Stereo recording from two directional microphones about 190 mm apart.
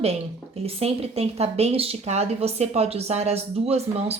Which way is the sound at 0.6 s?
30° right (ahead or behind).